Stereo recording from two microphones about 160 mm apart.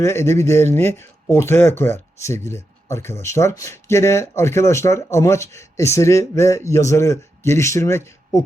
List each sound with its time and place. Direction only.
0.0 s speech: 15° left (ahead or behind)